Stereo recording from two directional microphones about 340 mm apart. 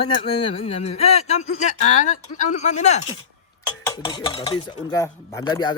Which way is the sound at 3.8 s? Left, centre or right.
Centre.